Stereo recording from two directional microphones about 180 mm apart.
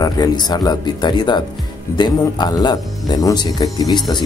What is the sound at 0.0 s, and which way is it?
A man's voice, 20° left (ahead or behind).